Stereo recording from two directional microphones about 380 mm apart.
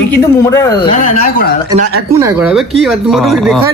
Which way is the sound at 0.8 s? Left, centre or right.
Left.